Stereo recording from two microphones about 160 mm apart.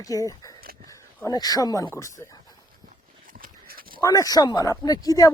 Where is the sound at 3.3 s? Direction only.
65° right (ahead or behind).